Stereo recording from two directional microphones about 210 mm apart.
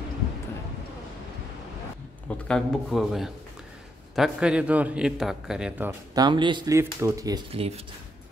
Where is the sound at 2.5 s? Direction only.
Centre (ahead or behind).